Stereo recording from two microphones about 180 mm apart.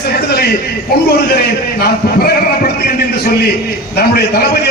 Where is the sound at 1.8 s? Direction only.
60° left (ahead or behind).